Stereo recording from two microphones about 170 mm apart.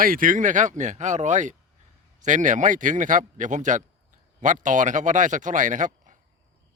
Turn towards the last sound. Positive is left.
turn(degrees=-50)  # may be behind; listen again after turning